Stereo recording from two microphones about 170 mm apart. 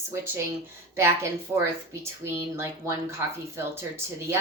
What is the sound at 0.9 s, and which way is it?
A woman's voice, 15° right (ahead or behind).